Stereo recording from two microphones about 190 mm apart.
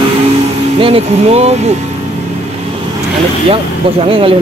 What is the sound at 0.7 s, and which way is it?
Speech, 30° right (ahead or behind).